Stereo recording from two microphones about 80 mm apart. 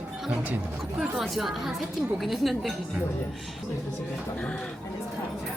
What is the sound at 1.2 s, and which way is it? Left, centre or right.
Speech, centre.